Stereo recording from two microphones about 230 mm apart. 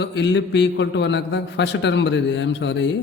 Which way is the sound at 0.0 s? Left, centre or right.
Left.